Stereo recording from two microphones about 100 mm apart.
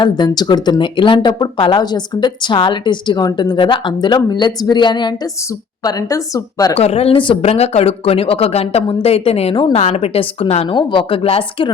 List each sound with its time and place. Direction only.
0.0 s a woman's voice: 50° left (ahead or behind); by 6.7 s 35° left (ahead or behind)
6.7 s a woman's voice: 90° left
10.8 s speech: 55° left (ahead or behind)